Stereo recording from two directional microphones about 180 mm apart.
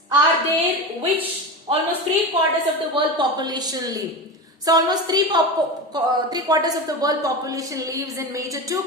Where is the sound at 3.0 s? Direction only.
25° right (ahead or behind).